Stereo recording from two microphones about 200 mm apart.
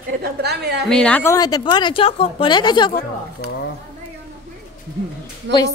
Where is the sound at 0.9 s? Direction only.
5° left (ahead or behind); by 3.0 s 20° left (ahead or behind).